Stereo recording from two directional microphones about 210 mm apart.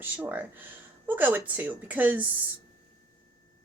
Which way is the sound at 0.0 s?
10° right (ahead or behind).